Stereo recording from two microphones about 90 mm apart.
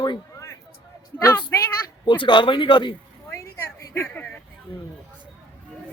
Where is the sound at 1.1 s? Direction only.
25° left (ahead or behind).